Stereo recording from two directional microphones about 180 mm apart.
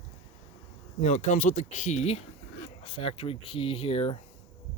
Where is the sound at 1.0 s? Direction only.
40° left (ahead or behind).